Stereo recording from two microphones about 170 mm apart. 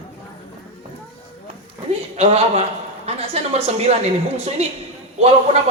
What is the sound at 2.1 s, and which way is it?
A woman's voice, 40° right (ahead or behind).